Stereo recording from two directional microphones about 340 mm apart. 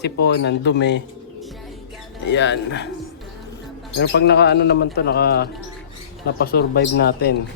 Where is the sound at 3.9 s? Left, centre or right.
Left.